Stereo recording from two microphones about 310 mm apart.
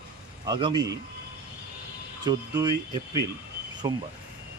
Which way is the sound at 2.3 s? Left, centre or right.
Centre.